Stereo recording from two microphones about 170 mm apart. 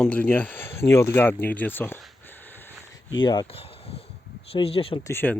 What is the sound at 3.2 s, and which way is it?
Speech, 25° left (ahead or behind).